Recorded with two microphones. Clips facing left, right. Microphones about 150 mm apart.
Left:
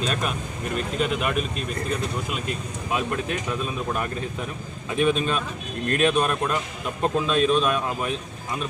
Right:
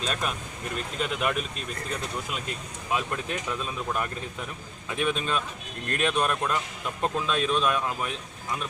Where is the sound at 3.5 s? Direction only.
10° left (ahead or behind).